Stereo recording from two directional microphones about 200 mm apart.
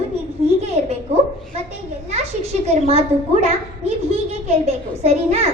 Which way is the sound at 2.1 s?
30° right (ahead or behind).